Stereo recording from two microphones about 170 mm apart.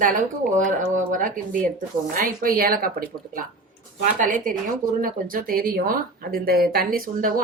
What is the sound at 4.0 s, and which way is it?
Speech, 50° right (ahead or behind).